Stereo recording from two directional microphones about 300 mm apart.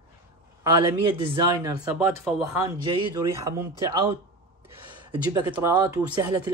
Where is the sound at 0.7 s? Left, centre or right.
Centre.